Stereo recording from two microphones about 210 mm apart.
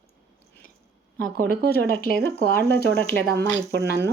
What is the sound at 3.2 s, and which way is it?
Speech, 50° right (ahead or behind).